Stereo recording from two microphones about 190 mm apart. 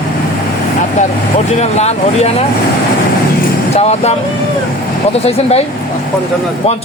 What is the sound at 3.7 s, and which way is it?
Speech, 35° left (ahead or behind).